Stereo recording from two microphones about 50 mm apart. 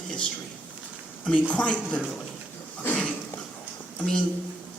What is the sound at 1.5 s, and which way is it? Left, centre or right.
Speech, left.